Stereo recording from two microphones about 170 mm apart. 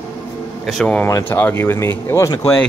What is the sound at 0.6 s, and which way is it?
Speech, 5° left (ahead or behind).